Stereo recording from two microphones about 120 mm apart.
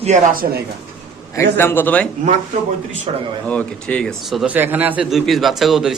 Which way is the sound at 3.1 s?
60° right (ahead or behind).